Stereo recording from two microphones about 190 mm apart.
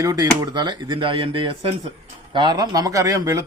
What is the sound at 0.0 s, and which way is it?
Speech, 20° right (ahead or behind).